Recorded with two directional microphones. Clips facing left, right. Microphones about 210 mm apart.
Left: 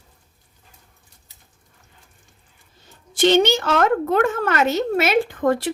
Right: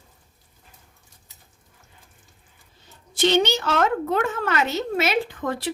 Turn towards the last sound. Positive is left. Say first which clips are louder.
# left 7 dB
turn(degrees=50)  # may be behind; listen again after turning